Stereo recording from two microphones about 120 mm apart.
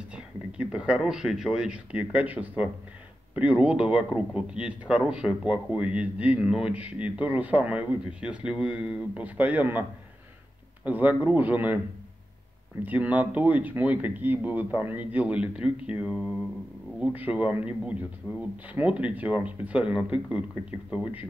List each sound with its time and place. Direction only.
0.1 s speech: 10° right (ahead or behind)
12.8 s speech: 15° right (ahead or behind)
15.9 s mantra: 5° right (ahead or behind)
17.0 s speech: 10° right (ahead or behind)
18.3 s speech: 30° left (ahead or behind)
18.7 s speech: 10° right (ahead or behind)